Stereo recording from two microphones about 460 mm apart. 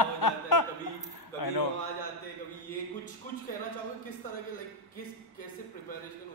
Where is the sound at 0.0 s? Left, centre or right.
Left.